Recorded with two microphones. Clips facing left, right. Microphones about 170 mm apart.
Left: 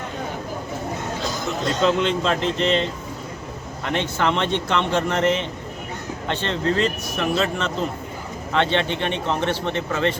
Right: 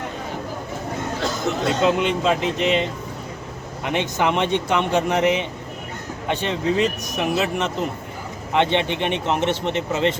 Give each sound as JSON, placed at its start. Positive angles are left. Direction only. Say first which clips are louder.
{"t": 1.6, "sound": "speech", "louder": "even", "side_deg": -10}